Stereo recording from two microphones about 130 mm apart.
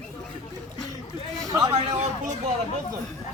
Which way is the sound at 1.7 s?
50° right (ahead or behind).